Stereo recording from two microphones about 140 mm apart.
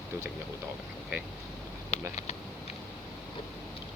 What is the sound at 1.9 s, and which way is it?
Speech, 55° left (ahead or behind).